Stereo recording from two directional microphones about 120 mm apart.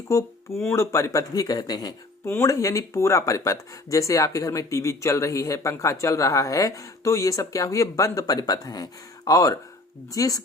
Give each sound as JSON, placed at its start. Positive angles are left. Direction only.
{"t": 0.1, "sound": "speech", "side_deg": 25}
{"t": 2.2, "sound": "speech", "side_deg": 20}